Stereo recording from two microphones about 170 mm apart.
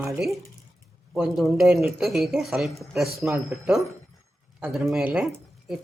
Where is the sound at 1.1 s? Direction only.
Centre (ahead or behind).